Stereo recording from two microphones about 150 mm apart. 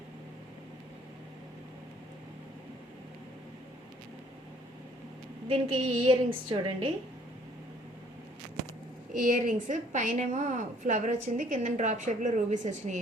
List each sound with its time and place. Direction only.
5.5 s a woman's voice: 35° right (ahead or behind)
9.3 s a woman's voice: 60° right (ahead or behind)